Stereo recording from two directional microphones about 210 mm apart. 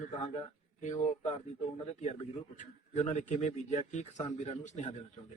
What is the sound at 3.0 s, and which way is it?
A man's voice, 30° left (ahead or behind).